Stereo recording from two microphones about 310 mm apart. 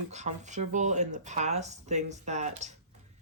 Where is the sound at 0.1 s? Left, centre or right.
Right.